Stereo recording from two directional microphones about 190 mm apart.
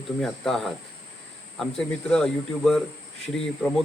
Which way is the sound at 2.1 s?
5° left (ahead or behind).